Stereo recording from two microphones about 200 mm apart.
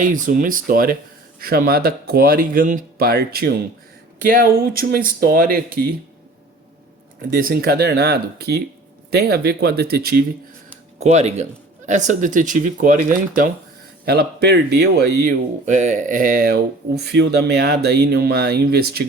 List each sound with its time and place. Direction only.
0.0 s speech: 40° right (ahead or behind)
7.3 s speech: 50° right (ahead or behind)
11.0 s speech: 35° right (ahead or behind); by 19.0 s 50° right (ahead or behind)